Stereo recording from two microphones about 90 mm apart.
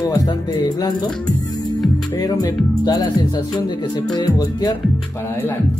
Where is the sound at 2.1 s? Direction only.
45° left (ahead or behind).